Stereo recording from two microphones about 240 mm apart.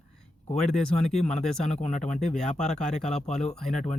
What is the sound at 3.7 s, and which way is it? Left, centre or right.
Speech, left.